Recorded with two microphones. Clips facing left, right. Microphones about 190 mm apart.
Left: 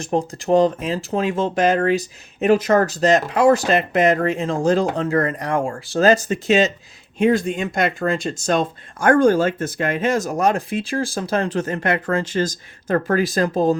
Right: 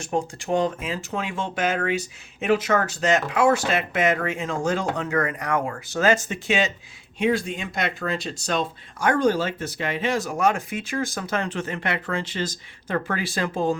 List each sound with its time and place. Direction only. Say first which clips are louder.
0.0 s speech: left 5 dB; 35° left (ahead or behind)